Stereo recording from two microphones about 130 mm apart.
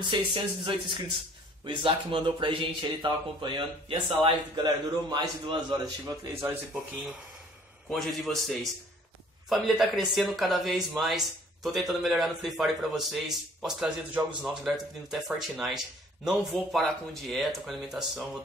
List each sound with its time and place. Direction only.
0.1 s speech: 35° right (ahead or behind)
7.9 s speech: centre (ahead or behind)